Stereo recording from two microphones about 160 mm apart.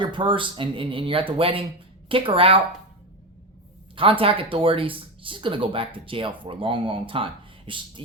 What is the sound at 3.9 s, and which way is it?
Speech, 35° right (ahead or behind).